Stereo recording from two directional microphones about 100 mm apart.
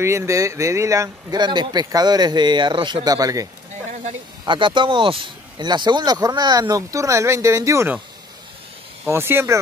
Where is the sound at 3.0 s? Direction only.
35° right (ahead or behind).